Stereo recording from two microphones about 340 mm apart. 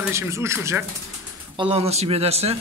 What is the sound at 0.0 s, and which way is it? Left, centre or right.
A man's voice, centre.